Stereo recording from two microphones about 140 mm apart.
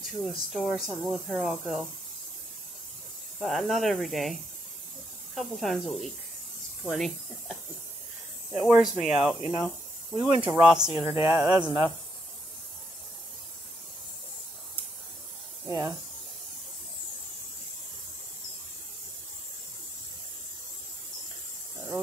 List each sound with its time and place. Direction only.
0.0 s speech: centre (ahead or behind)
3.3 s speech: centre (ahead or behind)
8.6 s speech: 5° right (ahead or behind)
11.0 s speech: 15° right (ahead or behind)
15.6 s speech: 20° right (ahead or behind)